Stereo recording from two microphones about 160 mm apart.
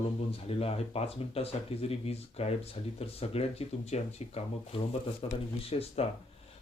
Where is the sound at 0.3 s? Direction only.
40° left (ahead or behind).